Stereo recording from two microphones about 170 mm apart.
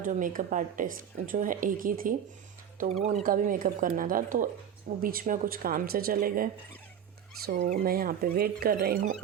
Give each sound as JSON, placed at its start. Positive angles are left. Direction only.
{"t": 0.0, "sound": "speech", "side_deg": -50}